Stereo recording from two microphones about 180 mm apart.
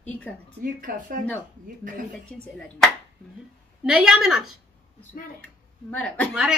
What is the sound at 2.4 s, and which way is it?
Speech, 5° left (ahead or behind).